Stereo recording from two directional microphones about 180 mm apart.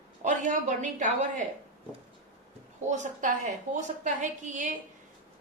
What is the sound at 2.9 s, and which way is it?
A woman's voice, 40° right (ahead or behind).